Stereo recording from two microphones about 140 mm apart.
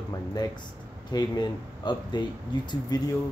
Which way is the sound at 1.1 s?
30° left (ahead or behind).